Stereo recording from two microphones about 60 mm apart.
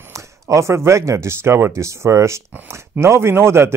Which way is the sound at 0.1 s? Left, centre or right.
Right.